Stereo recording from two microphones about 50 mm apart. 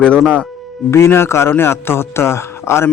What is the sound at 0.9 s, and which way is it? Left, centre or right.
Speech, left.